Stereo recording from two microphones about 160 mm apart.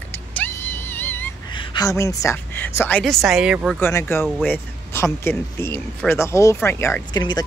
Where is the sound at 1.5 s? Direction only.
30° left (ahead or behind); by 3.0 s 15° left (ahead or behind).